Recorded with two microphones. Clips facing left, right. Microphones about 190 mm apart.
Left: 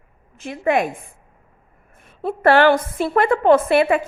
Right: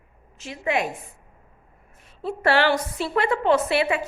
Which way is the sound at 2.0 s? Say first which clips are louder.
Left 6 dB; 55° left (ahead or behind).